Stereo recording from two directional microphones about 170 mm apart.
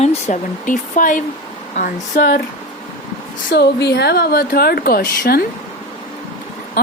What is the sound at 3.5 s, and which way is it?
A woman's voice, 80° left.